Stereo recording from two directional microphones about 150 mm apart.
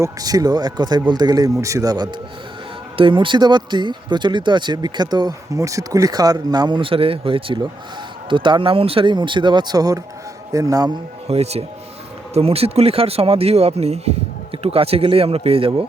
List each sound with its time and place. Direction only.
0.0 s speech: 25° right (ahead or behind)
11.3 s speech: 45° right (ahead or behind)